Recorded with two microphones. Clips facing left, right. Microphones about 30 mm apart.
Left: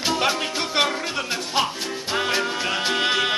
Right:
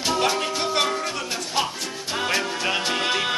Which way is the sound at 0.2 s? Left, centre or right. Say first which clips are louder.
Even; centre.